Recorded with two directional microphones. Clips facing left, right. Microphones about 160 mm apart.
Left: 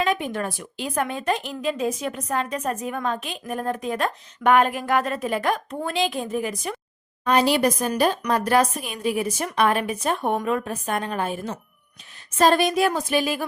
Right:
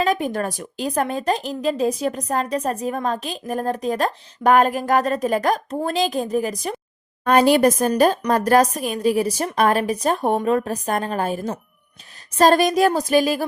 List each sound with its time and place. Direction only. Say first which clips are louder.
0.0 s a woman's voice: right 3 dB; 40° right (ahead or behind)
7.3 s a woman's voice: right 5 dB; 50° right (ahead or behind)